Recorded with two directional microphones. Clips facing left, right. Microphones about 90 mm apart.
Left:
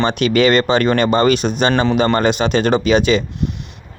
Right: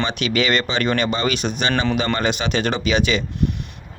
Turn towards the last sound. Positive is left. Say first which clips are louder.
# left 6 dB
turn(degrees=40)  # may be behind; listen again after turning